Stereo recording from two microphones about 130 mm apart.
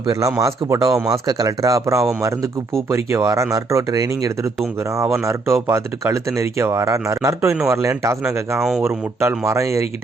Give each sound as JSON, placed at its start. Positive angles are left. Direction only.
{"t": 0.0, "sound": "speech", "side_deg": -30}